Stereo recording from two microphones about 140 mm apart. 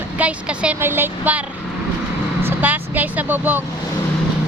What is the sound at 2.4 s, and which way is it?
Speech, 15° right (ahead or behind).